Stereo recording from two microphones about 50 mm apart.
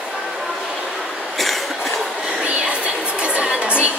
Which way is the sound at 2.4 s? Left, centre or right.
Right.